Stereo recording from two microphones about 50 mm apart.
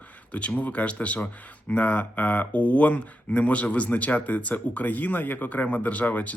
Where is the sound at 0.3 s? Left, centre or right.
Left.